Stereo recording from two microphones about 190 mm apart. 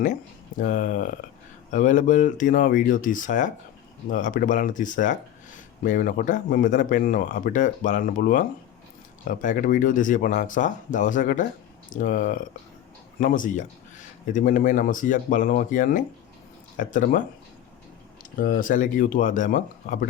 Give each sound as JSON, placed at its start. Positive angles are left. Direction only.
{"t": 0.6, "sound": "speech", "side_deg": 45}
{"t": 18.3, "sound": "speech", "side_deg": 45}